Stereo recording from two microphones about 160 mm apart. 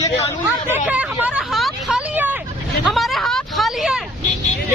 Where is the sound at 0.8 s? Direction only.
10° right (ahead or behind).